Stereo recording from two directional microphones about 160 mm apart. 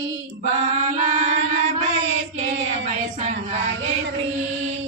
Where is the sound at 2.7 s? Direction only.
40° right (ahead or behind).